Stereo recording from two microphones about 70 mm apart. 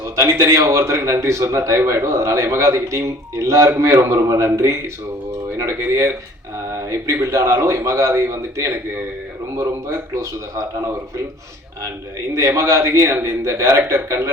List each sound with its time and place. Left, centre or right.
0.2 s a man's voice: right
12.3 s a man's voice: right